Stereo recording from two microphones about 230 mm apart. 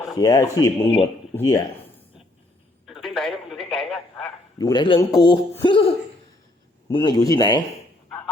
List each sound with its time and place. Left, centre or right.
0.2 s speech: centre
1.5 s a sound: centre
2.8 s telephone: centre
4.5 s a man's voice: centre